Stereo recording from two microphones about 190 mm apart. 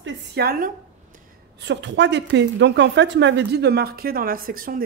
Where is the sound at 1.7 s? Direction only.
70° right (ahead or behind).